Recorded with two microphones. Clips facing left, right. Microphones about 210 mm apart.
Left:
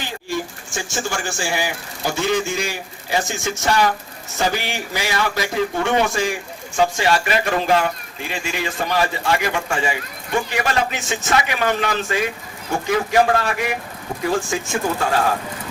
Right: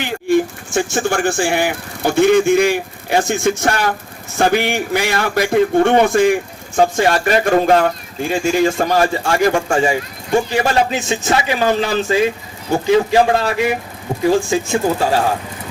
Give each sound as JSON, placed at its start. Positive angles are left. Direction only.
{"t": 0.0, "sound": "a man's voice", "side_deg": -55}
{"t": 9.6, "sound": "speech", "side_deg": -35}